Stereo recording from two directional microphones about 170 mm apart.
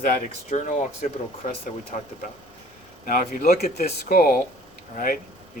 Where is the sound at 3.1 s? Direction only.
50° left (ahead or behind).